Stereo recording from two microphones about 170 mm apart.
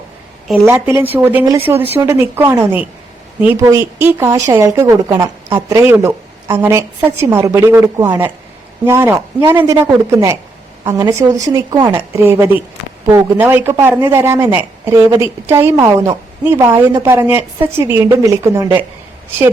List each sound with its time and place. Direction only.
0.7 s speech: 15° right (ahead or behind)
10.8 s speech: 20° right (ahead or behind)